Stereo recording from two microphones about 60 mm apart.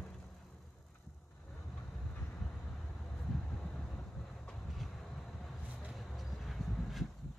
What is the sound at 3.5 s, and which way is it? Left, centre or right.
Vehicle, centre.